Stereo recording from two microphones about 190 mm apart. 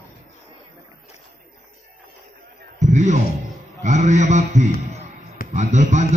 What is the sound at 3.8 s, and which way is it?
A man's voice, 40° right (ahead or behind).